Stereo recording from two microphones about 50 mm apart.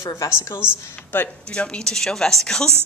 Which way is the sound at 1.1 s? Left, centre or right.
Left.